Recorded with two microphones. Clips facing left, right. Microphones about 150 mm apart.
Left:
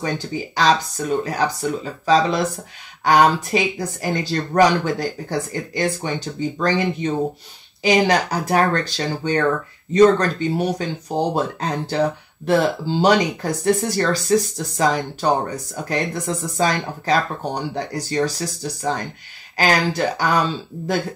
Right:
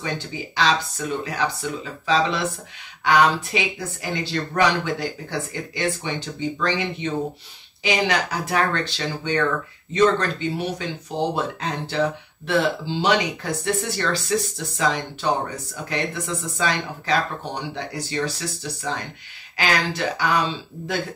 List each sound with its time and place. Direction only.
0.6 s speech: 40° left (ahead or behind)